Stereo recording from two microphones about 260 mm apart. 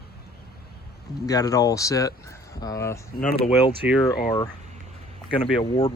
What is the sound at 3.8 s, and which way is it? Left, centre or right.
Speech, centre.